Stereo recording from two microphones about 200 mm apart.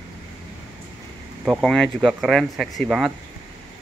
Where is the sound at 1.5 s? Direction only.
Centre (ahead or behind).